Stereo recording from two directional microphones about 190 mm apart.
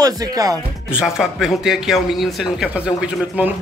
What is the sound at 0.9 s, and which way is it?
A man's voice, centre (ahead or behind).